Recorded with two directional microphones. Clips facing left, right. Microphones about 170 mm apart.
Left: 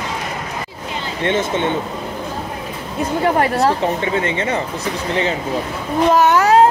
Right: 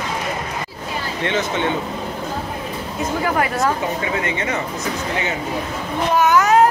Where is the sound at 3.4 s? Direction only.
30° left (ahead or behind).